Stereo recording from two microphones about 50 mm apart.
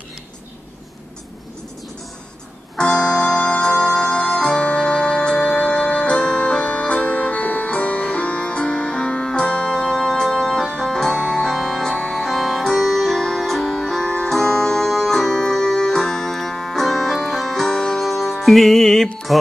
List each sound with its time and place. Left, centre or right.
2.7 s music: centre